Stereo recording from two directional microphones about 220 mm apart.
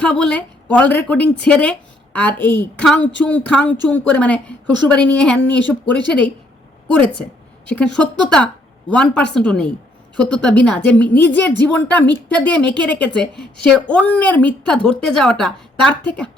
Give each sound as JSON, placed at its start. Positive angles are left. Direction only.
{"t": 0.0, "sound": "a woman's voice", "side_deg": 5}